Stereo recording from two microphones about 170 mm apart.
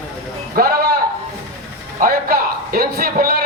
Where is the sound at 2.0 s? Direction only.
60° right (ahead or behind).